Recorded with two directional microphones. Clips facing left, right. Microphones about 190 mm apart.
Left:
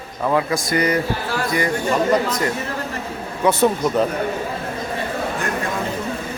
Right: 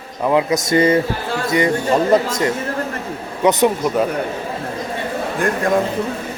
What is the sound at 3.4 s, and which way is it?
Speech, 15° right (ahead or behind).